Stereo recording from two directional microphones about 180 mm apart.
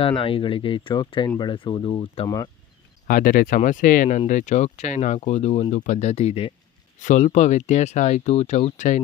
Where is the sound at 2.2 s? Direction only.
20° left (ahead or behind).